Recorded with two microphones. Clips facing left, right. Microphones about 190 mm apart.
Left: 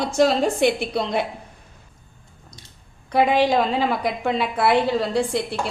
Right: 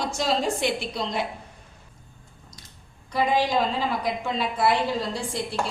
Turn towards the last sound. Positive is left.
turn(degrees=65)  # may be behind; listen again after turning